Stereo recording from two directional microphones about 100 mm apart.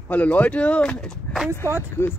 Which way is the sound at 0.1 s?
15° left (ahead or behind).